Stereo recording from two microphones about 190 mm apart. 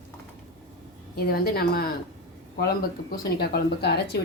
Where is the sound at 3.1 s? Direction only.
55° left (ahead or behind).